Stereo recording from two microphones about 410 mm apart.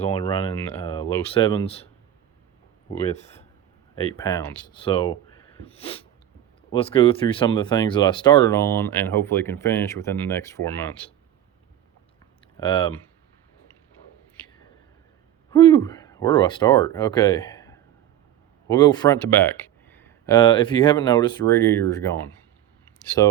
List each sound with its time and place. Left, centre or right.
0.0 s speech: centre
3.1 s speech: centre
12.5 s speech: centre
15.4 s speech: centre
23.2 s speech: centre